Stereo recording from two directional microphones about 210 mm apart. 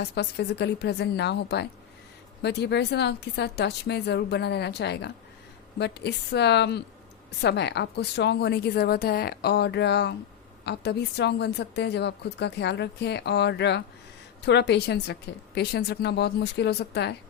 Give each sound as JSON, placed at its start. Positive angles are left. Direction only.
{"t": 0.0, "sound": "a woman's voice", "side_deg": 50}